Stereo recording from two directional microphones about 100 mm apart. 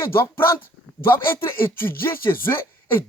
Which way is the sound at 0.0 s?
25° left (ahead or behind).